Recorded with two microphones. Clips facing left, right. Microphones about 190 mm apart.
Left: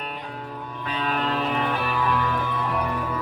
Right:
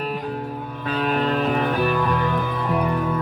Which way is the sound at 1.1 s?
45° right (ahead or behind).